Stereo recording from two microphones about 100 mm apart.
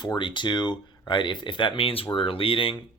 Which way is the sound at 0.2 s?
55° left (ahead or behind).